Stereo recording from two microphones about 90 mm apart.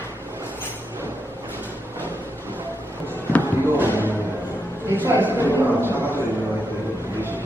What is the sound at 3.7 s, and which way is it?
Music, 25° right (ahead or behind).